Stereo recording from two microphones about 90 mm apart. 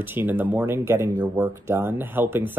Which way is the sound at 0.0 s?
20° right (ahead or behind).